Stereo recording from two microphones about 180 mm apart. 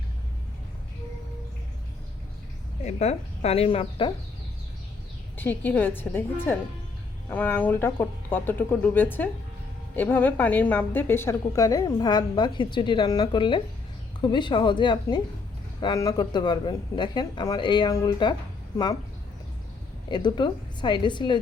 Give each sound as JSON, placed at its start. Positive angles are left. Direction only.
{"t": 2.8, "sound": "speech", "side_deg": 35}
{"t": 5.4, "sound": "a woman's voice", "side_deg": 10}
{"t": 20.1, "sound": "speech", "side_deg": 25}